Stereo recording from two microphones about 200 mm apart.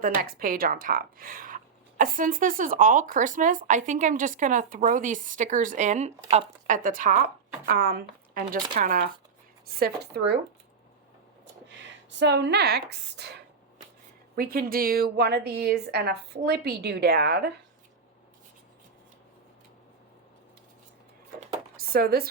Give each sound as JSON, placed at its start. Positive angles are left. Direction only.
{"t": 0.0, "sound": "a woman's voice", "side_deg": -45}
{"t": 12.2, "sound": "a woman's voice", "side_deg": -60}
{"t": 14.3, "sound": "a woman's voice", "side_deg": -45}
{"t": 21.8, "sound": "speech", "side_deg": -50}